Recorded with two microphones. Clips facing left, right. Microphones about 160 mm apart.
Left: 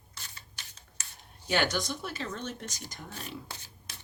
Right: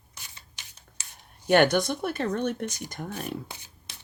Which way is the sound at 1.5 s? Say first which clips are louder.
Right 9 dB; 55° right (ahead or behind).